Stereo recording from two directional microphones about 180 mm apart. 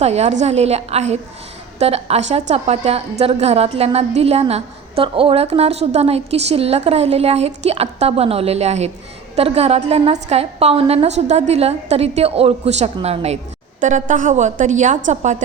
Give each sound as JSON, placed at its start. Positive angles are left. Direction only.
{"t": 0.0, "sound": "a woman's voice", "side_deg": -35}